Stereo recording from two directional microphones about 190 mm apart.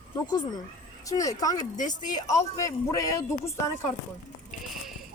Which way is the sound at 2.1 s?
20° left (ahead or behind).